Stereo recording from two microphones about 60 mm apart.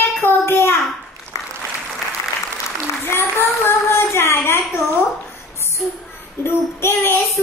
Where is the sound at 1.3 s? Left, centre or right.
Left.